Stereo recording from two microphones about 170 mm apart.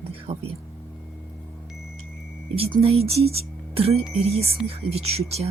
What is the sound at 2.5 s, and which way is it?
Speech, 35° right (ahead or behind).